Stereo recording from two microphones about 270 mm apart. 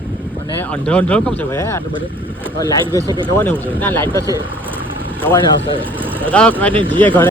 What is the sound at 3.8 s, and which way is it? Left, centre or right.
Speech, centre.